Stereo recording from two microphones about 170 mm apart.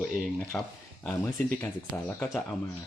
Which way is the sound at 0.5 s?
15° left (ahead or behind).